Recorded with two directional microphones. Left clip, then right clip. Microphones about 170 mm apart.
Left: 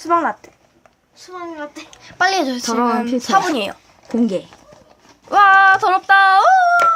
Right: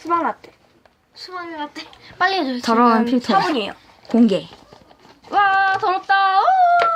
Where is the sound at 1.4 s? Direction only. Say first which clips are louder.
Even; 45° right (ahead or behind).